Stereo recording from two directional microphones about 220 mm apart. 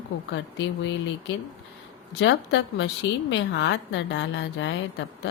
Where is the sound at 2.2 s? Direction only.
55° left (ahead or behind).